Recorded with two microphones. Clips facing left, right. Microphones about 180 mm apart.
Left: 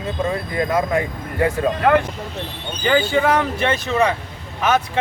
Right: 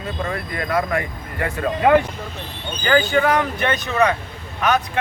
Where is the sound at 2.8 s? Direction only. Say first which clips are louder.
Even; 30° left (ahead or behind).